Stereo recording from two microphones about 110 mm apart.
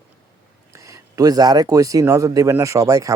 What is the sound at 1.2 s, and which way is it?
A man's voice, 35° right (ahead or behind).